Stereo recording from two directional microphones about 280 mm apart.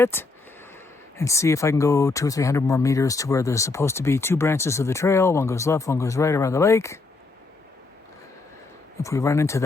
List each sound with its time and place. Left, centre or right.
0.0 s speech: centre
9.0 s speech: centre